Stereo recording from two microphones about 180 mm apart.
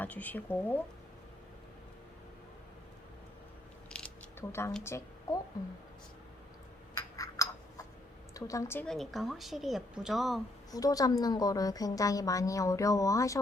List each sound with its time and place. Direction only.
0.0 s speech: 10° left (ahead or behind)
3.8 s mechanisms: 5° left (ahead or behind)
4.8 s a woman's voice: 15° left (ahead or behind)
6.9 s a sound: 20° left (ahead or behind)
8.3 s speech: 20° left (ahead or behind); by 10.4 s centre (ahead or behind)
10.7 s a woman's voice: 20° left (ahead or behind)